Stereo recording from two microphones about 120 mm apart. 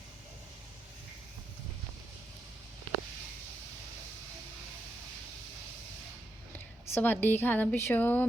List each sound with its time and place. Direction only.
6.5 s a woman's voice: 15° left (ahead or behind)